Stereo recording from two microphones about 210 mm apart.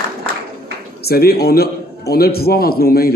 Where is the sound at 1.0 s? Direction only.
45° left (ahead or behind).